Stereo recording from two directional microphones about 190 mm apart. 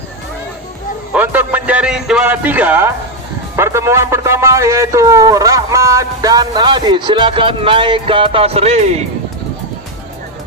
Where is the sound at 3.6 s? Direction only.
15° right (ahead or behind); by 9.0 s 35° right (ahead or behind).